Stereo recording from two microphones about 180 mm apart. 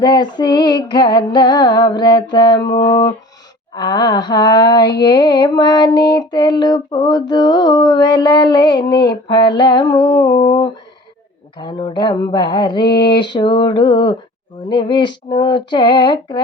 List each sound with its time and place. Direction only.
0.0 s female singing: 25° left (ahead or behind)